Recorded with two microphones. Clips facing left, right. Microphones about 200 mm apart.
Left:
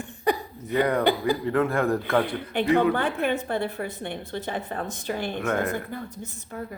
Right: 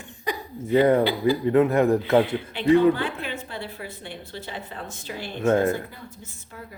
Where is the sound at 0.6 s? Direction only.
25° right (ahead or behind).